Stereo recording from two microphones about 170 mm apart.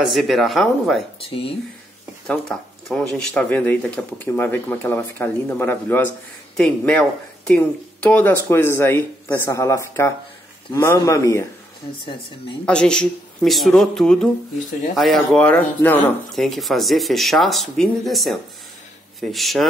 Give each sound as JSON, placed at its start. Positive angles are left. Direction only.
{"t": 0.0, "sound": "speech", "side_deg": 0}
{"t": 1.2, "sound": "speech", "side_deg": 35}
{"t": 2.2, "sound": "speech", "side_deg": 5}
{"t": 12.6, "sound": "speech", "side_deg": 5}